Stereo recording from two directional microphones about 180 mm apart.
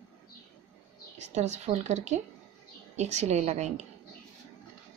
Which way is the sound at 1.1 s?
40° right (ahead or behind).